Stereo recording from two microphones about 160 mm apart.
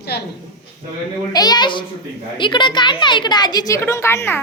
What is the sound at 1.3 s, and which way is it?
A woman's voice, 25° left (ahead or behind).